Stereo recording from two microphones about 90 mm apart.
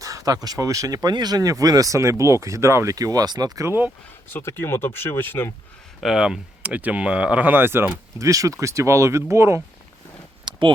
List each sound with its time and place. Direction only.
0.0 s speech: 40° right (ahead or behind)
4.3 s speech: 25° left (ahead or behind)
6.0 s speech: 5° right (ahead or behind); by 7.9 s 25° right (ahead or behind)
8.2 s speech: 40° right (ahead or behind)
10.5 s a sound: 55° right (ahead or behind)